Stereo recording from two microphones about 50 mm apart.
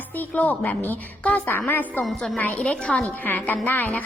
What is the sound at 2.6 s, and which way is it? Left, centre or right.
Speech, left.